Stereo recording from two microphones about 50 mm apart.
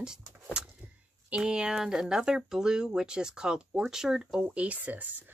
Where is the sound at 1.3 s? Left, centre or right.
Centre.